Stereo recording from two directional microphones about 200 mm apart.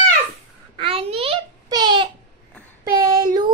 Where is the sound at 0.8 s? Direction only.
30° right (ahead or behind).